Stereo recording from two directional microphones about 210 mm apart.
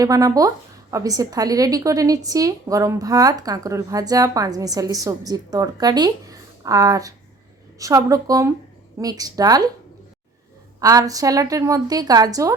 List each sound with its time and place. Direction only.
0.0 s a woman's voice: 15° right (ahead or behind)
10.8 s a woman's voice: 15° right (ahead or behind)